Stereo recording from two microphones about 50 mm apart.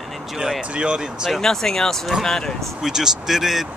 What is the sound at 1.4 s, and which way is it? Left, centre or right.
Speech, centre.